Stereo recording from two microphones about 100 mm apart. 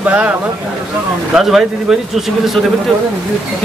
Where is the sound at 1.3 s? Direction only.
5° right (ahead or behind).